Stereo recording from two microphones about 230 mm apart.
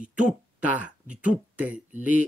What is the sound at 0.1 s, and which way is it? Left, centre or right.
Speech, centre.